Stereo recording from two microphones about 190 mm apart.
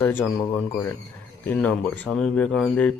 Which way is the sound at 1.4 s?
10° left (ahead or behind).